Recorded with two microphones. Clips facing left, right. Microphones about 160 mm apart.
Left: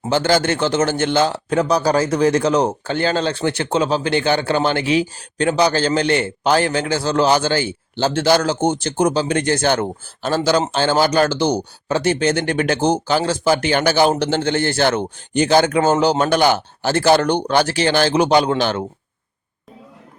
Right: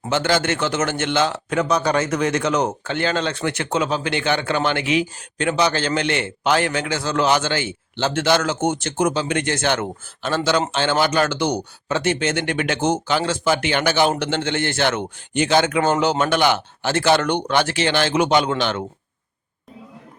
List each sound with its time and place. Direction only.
0.1 s a man's voice: 35° left (ahead or behind)